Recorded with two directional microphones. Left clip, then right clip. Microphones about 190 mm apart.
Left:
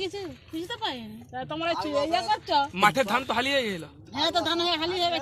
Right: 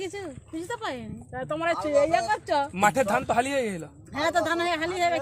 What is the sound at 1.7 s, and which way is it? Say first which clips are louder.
Speech: right 4 dB; 45° right (ahead or behind).